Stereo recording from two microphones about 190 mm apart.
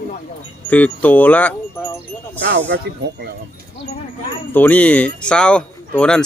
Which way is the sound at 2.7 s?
60° right (ahead or behind).